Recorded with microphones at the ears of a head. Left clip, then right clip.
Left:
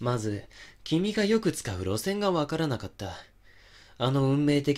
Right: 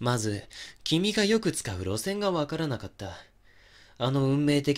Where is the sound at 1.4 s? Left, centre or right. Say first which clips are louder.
Left 1 dB; centre.